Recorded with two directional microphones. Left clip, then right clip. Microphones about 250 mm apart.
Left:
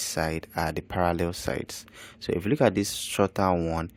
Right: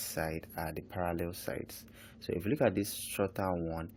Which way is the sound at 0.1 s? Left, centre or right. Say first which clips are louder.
Left 6 dB; left.